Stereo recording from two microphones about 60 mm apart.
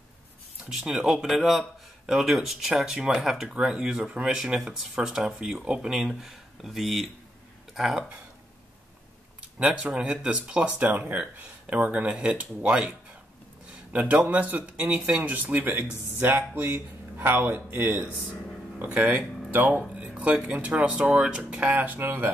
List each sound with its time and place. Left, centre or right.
0.7 s speech: centre
9.6 s speech: centre
10.9 s speech: right
13.9 s speech: right
20.0 s a sound: right
20.6 s speech: centre
21.7 s speech: right